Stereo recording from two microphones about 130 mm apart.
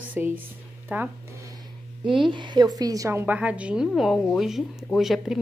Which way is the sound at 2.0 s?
40° right (ahead or behind).